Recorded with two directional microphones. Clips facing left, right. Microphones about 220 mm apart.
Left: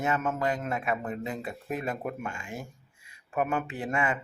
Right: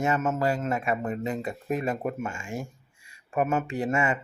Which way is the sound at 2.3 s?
45° right (ahead or behind).